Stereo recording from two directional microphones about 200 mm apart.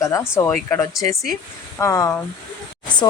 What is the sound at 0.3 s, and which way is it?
A man's voice, 10° left (ahead or behind).